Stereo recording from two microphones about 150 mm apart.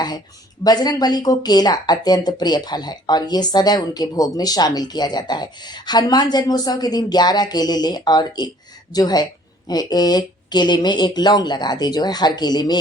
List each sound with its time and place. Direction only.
0.6 s speech: 25° left (ahead or behind)